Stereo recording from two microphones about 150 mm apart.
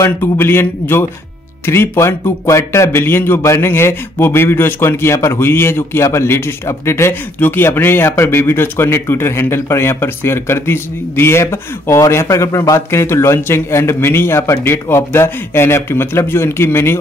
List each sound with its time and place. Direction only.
0.0 s speech: 15° left (ahead or behind)